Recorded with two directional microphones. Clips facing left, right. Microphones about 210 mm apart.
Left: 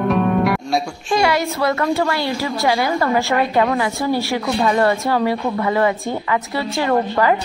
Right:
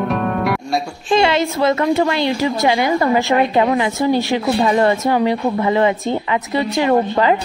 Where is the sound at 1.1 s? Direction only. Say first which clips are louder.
Right 3 dB; 25° right (ahead or behind).